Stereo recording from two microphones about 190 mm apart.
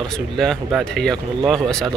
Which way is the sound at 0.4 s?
Centre (ahead or behind).